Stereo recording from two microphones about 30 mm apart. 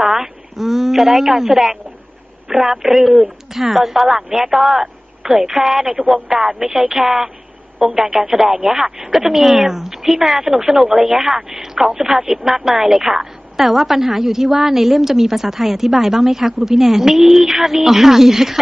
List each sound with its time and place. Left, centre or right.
0.1 s a woman's voice: centre
5.9 s speech: right
6.7 s a woman's voice: centre
11.5 s a sound: centre
12.3 s a woman's voice: centre